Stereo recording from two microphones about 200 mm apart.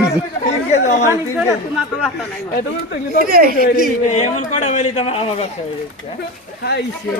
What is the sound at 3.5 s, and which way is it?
Speech, 50° left (ahead or behind).